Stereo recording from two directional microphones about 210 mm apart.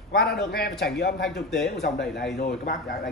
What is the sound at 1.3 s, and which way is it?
Speech, centre (ahead or behind).